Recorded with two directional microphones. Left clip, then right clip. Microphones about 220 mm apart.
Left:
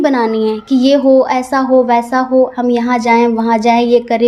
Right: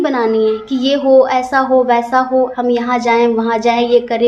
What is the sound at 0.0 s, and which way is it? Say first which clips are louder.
A woman's voice: left 1 dB; 40° left (ahead or behind).